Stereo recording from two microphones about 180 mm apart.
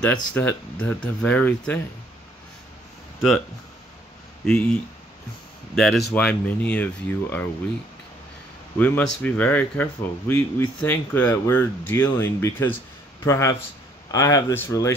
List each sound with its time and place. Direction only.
0.0 s speech: 10° left (ahead or behind)
3.2 s speech: centre (ahead or behind)
5.8 s speech: centre (ahead or behind)
8.7 s speech: 10° left (ahead or behind)